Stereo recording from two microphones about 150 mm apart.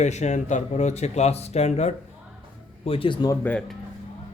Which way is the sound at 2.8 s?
35° left (ahead or behind).